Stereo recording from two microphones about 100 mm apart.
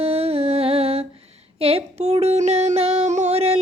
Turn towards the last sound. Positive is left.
turn(degrees=-90)